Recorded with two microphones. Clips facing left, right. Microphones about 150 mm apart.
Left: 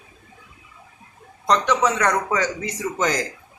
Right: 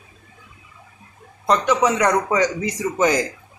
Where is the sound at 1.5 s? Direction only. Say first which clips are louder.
Right 2 dB; 10° right (ahead or behind).